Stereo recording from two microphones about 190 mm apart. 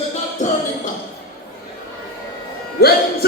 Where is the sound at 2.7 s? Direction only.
55° left (ahead or behind).